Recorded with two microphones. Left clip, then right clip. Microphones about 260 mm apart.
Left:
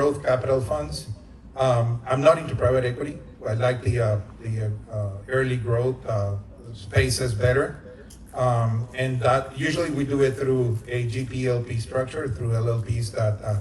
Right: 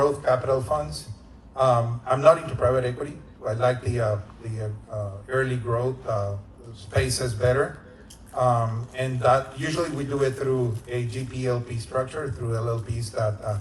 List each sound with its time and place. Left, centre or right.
0.0 s a man's voice: centre